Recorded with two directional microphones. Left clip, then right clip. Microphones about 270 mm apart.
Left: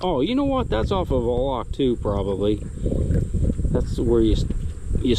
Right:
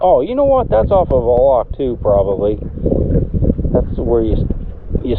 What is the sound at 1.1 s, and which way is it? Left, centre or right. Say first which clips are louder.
Speech: right 11 dB; left.